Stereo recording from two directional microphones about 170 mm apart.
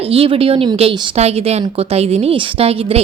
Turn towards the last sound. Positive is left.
turn(degrees=-35)  # may be behind; listen again after turning